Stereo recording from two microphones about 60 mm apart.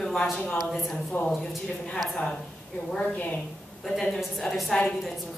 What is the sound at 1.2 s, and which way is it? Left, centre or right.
Speech, left.